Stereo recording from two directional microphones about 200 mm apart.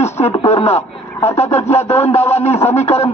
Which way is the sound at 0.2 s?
30° left (ahead or behind).